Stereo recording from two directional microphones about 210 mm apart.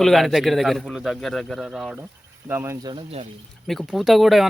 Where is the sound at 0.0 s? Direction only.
Centre (ahead or behind); by 3.2 s 25° right (ahead or behind).